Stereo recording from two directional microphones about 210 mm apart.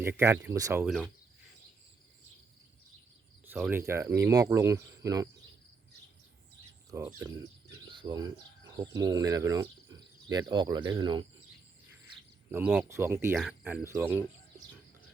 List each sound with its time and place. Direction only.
0.0 s speech: 10° right (ahead or behind)
3.4 s speech: 10° right (ahead or behind)
6.9 s speech: 10° right (ahead or behind)
7.9 s bird: 20° right (ahead or behind)
8.7 s speech: 20° right (ahead or behind)
12.5 s speech: 10° right (ahead or behind)